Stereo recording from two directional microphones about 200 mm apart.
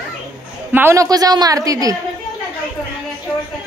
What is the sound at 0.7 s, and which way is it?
A woman's voice, 10° right (ahead or behind).